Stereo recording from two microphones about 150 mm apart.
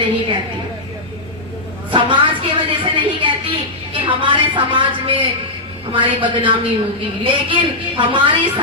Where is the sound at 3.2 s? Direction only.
35° right (ahead or behind).